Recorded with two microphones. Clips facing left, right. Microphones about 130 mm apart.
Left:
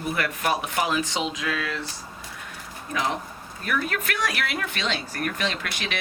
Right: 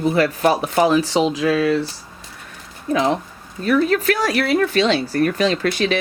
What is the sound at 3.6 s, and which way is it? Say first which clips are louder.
A woman's voice: right 11 dB; 30° right (ahead or behind).